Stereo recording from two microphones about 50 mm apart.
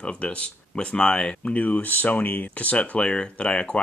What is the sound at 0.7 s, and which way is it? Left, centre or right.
Speech, centre.